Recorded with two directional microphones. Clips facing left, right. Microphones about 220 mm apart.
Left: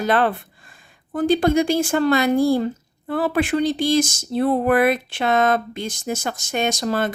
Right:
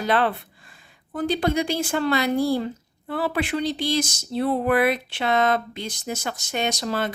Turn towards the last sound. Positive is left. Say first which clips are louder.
# left 4 dB
turn(degrees=50)  # may be behind; listen again after turning